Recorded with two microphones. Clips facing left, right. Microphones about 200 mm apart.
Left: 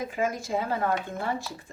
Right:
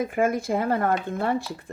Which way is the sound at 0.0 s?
55° right (ahead or behind).